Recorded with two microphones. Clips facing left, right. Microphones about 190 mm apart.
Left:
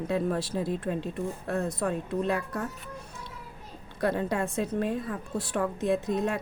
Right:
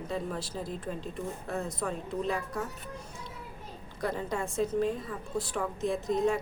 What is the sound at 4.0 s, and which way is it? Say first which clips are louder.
A woman's voice: left 5 dB; 65° left (ahead or behind).